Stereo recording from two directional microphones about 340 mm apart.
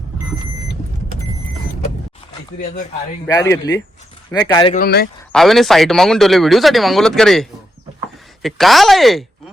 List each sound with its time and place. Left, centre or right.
3.2 s speech: centre
4.8 s speech: left
5.3 s a man's voice: centre